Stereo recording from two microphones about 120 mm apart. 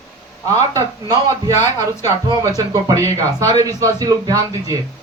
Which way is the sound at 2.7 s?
30° right (ahead or behind).